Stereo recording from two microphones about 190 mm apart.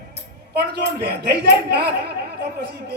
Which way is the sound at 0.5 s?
60° right (ahead or behind).